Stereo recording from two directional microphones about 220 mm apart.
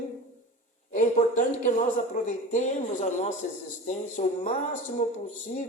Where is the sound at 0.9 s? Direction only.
35° left (ahead or behind).